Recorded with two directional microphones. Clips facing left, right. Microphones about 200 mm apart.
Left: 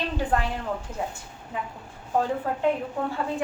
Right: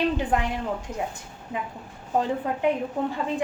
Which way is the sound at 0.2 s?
15° right (ahead or behind).